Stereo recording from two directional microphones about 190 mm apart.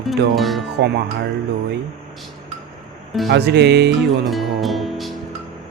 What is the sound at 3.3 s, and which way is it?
Speech, 65° right (ahead or behind).